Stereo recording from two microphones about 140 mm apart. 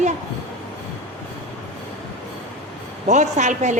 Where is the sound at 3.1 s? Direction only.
60° right (ahead or behind).